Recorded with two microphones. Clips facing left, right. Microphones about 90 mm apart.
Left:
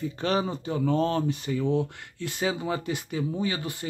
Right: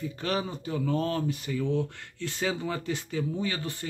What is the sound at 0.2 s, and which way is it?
Speech, 30° left (ahead or behind).